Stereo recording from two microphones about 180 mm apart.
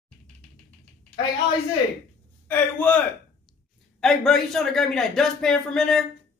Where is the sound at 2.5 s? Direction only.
10° left (ahead or behind).